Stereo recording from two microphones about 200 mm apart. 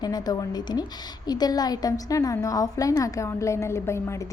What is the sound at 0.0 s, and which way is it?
A woman's voice, 20° left (ahead or behind).